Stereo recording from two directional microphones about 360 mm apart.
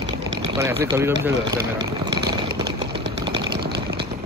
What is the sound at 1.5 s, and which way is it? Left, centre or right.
Vehicle, right.